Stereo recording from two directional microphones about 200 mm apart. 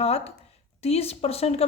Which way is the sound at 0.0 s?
30° left (ahead or behind).